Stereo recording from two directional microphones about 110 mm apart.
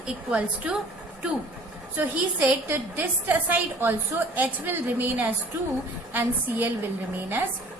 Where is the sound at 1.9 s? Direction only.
15° right (ahead or behind).